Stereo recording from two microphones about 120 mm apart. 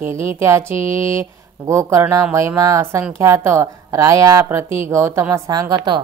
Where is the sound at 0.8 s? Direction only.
50° left (ahead or behind).